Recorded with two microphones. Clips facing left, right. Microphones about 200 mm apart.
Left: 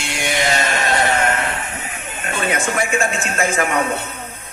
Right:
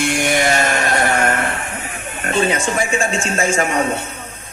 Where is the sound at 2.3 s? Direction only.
30° right (ahead or behind).